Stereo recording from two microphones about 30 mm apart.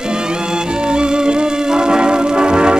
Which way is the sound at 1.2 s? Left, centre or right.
Right.